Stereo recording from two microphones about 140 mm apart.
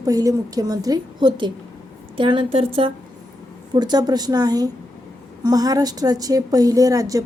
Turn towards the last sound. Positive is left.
turn(degrees=-25)  # may be behind; listen again after turning